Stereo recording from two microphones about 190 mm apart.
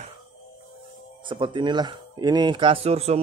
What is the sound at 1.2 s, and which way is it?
A man's voice, 25° right (ahead or behind).